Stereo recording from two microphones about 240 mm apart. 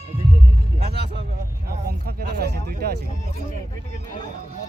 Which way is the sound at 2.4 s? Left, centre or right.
Right.